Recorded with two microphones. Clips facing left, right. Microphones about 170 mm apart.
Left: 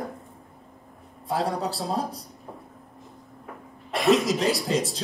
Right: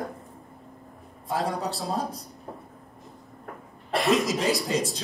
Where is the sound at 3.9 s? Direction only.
Centre (ahead or behind).